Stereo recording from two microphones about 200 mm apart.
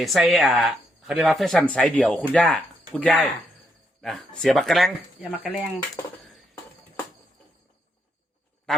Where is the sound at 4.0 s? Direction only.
Centre (ahead or behind).